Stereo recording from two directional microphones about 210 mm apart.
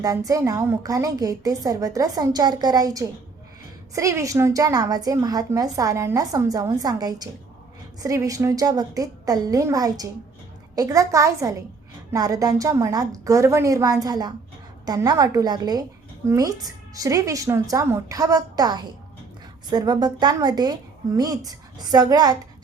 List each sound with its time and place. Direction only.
0.0 s a woman's voice: 15° right (ahead or behind)